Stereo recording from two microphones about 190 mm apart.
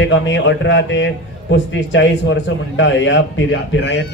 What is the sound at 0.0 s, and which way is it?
A man's voice, 75° left (ahead or behind).